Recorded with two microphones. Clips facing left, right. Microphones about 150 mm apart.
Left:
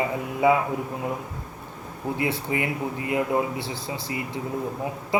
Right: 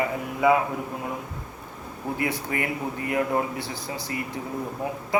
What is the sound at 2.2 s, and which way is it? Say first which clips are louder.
Speech: left 2 dB; 25° left (ahead or behind).